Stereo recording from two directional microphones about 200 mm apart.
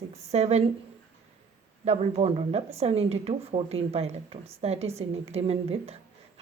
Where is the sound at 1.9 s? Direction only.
30° right (ahead or behind).